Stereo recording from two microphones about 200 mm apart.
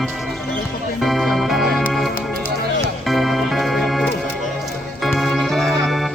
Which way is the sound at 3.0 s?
Centre (ahead or behind).